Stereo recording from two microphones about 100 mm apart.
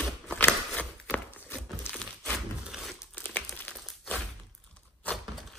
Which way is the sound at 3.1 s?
15° left (ahead or behind).